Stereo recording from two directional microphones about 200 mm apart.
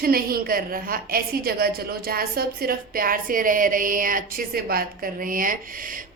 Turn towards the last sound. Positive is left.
turn(degrees=-45)  # may be behind; listen again after turning